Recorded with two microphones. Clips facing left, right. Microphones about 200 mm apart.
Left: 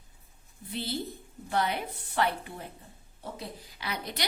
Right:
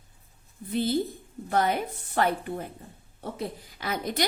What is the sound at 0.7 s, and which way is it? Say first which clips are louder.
A woman's voice: right 8 dB; 50° right (ahead or behind).